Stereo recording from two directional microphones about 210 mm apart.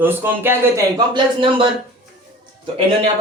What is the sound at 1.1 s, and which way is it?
Speech, 25° right (ahead or behind).